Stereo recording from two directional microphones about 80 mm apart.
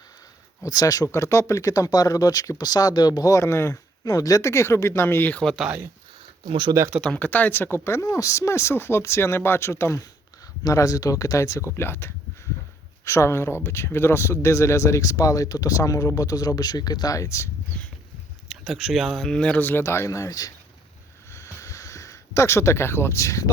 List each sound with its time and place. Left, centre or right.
0.6 s speech: left
4.0 s speech: left
6.4 s speech: right
7.0 s speech: centre; by 10.0 s left
10.6 s speech: left
11.8 s speech: left
18.4 s speech: centre; by 20.5 s left
21.3 s a sound: left